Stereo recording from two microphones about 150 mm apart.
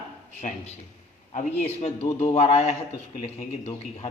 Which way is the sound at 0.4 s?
45° left (ahead or behind).